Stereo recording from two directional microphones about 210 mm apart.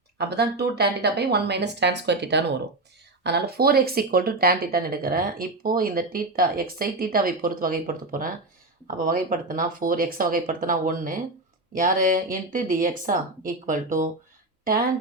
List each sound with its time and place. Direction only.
0.2 s speech: 50° right (ahead or behind)